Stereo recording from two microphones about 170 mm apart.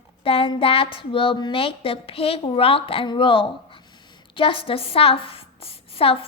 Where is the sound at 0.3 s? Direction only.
35° left (ahead or behind).